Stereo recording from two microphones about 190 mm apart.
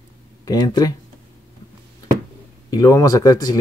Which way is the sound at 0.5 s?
20° left (ahead or behind).